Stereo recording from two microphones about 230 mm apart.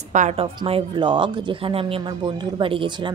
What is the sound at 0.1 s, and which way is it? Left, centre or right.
A woman's voice, right.